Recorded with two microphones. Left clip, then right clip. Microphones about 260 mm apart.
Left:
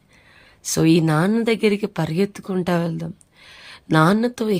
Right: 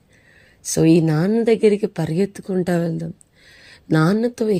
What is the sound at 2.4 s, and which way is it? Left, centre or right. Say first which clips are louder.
Speech: right 3 dB; left.